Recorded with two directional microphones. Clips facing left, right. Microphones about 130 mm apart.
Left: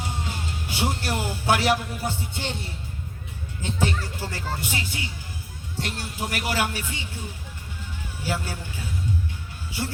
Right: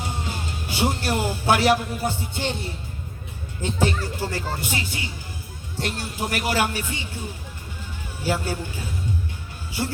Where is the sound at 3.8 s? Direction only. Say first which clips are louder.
Right 3 dB; 40° right (ahead or behind).